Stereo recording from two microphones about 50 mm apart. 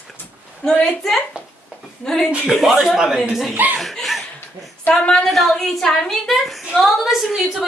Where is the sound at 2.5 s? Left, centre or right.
Centre.